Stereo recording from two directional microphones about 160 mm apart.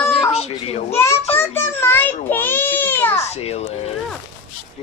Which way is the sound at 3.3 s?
40° left (ahead or behind).